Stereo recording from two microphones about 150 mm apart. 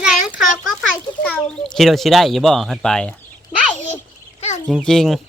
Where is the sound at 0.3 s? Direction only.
Centre (ahead or behind).